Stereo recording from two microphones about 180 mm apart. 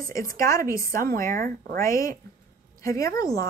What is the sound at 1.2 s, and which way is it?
Speech, 50° right (ahead or behind).